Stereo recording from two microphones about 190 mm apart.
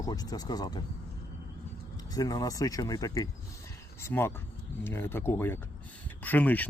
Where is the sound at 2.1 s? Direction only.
20° left (ahead or behind).